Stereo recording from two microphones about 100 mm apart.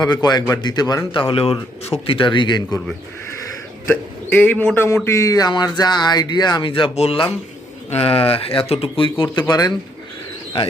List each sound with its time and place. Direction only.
0.0 s speech: 45° left (ahead or behind)
1.1 s speech: 65° left (ahead or behind)
3.8 s speech: 15° left (ahead or behind)
5.0 s speech: 30° left (ahead or behind); by 9.0 s 70° left (ahead or behind)
9.1 s speech: 50° left (ahead or behind)